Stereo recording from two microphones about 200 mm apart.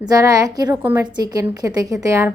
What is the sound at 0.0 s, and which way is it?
A woman's voice, 20° right (ahead or behind).